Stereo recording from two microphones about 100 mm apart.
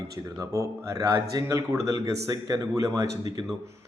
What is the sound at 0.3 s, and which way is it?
Speech, 30° right (ahead or behind).